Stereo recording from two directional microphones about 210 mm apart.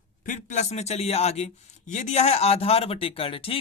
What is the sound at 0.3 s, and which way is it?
Speech, 35° left (ahead or behind).